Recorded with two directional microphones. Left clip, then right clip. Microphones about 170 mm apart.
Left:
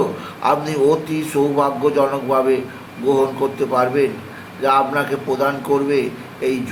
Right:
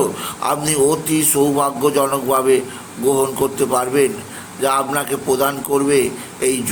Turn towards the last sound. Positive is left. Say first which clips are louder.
# right 3 dB
turn(degrees=-25)  # may be behind; listen again after turning